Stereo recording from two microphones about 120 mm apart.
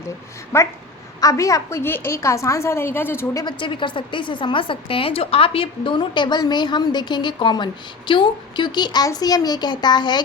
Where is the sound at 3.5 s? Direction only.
45° left (ahead or behind).